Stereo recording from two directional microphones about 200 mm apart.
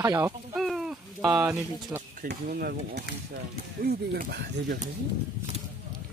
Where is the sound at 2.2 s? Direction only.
45° right (ahead or behind).